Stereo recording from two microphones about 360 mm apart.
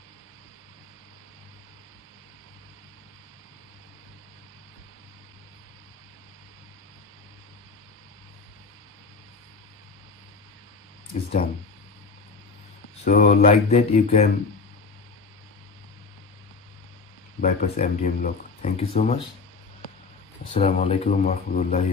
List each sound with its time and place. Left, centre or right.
13.0 s speech: left
17.4 s speech: left
20.5 s speech: centre